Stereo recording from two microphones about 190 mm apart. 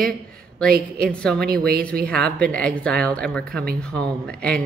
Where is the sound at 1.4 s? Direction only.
50° right (ahead or behind).